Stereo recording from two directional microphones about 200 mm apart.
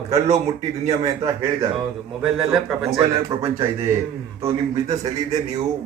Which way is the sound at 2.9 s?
15° right (ahead or behind).